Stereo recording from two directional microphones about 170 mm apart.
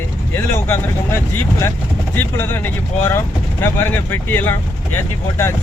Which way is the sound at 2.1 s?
15° left (ahead or behind).